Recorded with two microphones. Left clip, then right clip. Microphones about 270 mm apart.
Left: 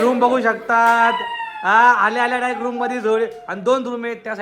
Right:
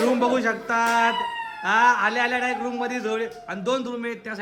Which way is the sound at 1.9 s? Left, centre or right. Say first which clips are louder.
Left 5 dB; centre.